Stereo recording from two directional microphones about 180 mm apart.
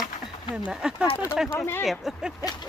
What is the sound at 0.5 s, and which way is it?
Speech, 5° right (ahead or behind).